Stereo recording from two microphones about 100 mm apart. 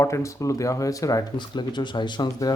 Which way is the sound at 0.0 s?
30° left (ahead or behind).